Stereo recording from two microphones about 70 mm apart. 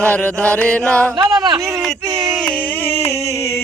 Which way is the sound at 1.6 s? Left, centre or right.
Right.